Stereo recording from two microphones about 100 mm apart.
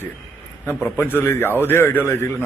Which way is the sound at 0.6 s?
20° left (ahead or behind).